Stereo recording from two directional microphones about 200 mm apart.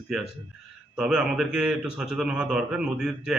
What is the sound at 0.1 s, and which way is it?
A man's voice, centre (ahead or behind).